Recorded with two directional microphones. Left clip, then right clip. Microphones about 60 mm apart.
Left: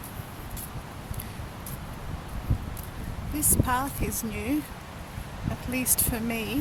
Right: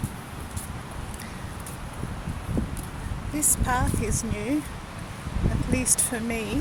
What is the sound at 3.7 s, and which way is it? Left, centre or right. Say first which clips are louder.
Speech: right 3 dB; left.